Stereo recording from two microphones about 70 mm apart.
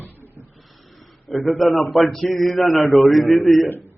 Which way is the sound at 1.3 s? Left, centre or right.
Centre.